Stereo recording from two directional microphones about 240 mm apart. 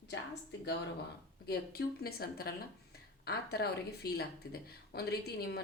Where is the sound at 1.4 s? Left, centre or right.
Left.